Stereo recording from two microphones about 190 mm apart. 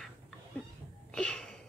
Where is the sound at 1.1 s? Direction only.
5° left (ahead or behind).